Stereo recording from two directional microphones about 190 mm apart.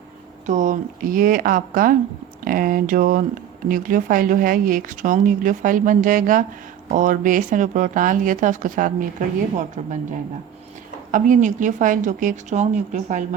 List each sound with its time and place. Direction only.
0.4 s a woman's voice: 40° right (ahead or behind)